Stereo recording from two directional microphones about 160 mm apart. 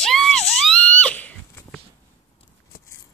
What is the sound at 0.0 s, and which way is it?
Screaming, 5° left (ahead or behind).